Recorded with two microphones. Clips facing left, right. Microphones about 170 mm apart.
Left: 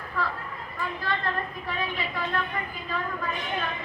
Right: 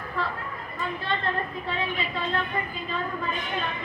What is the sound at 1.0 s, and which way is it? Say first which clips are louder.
A woman's voice: right 1 dB; 25° right (ahead or behind).